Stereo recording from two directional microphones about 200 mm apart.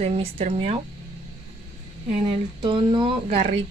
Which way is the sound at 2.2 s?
25° right (ahead or behind).